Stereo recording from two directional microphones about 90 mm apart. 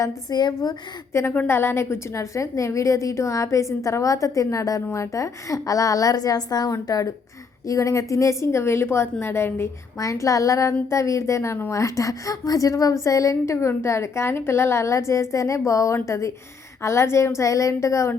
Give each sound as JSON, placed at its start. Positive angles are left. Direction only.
{"t": 0.0, "sound": "a woman's voice", "side_deg": 50}
{"t": 1.5, "sound": "a woman's voice", "side_deg": 25}